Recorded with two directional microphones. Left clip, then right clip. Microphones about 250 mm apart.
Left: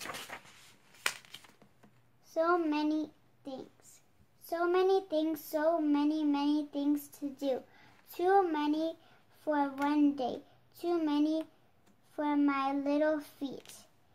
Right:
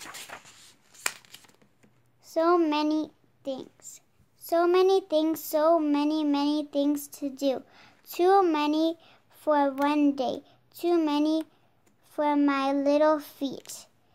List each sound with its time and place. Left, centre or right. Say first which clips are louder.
1.0 s crumpling: right 2 dB; centre
2.3 s a woman's voice: right 7 dB; right
4.5 s child singing: right 7 dB; right